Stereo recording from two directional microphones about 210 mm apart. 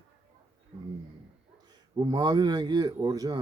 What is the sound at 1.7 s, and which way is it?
A man's voice, 20° right (ahead or behind).